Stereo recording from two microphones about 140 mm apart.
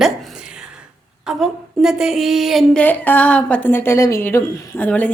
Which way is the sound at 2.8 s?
10° left (ahead or behind).